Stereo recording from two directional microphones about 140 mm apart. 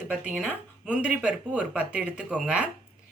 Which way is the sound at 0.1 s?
5° right (ahead or behind).